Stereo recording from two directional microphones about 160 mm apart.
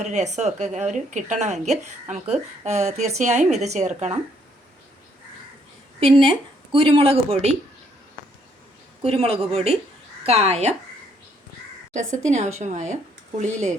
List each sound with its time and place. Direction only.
0.0 s speech: 50° right (ahead or behind)
6.0 s speech: 35° right (ahead or behind)
9.0 s speech: 40° right (ahead or behind)
11.9 s speech: 45° right (ahead or behind)